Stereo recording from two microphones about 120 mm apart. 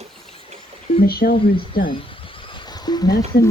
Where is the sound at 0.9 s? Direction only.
50° left (ahead or behind).